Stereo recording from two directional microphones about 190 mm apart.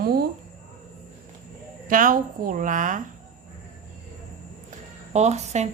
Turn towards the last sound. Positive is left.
turn(degrees=-35)  # may be behind; listen again after turning